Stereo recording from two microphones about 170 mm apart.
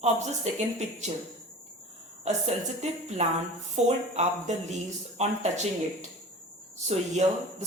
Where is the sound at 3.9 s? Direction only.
40° right (ahead or behind).